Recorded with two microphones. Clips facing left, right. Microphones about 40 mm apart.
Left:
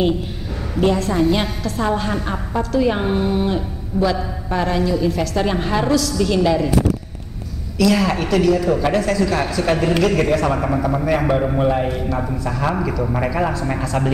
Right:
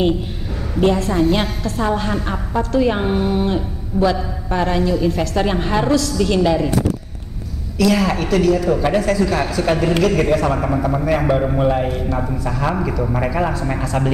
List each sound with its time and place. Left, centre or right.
1.0 s a woman's voice: centre
5.9 s a woman's voice: centre
6.1 s a woman's voice: centre
7.7 s a woman's voice: centre